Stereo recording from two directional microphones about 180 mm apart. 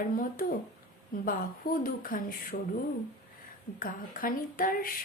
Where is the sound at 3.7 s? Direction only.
50° left (ahead or behind).